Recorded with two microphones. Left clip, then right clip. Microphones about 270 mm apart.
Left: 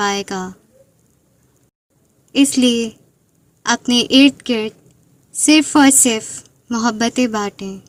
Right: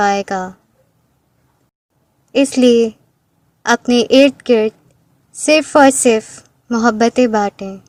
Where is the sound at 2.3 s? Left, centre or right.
Right.